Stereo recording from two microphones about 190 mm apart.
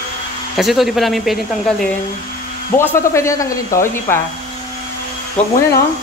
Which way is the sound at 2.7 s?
15° left (ahead or behind).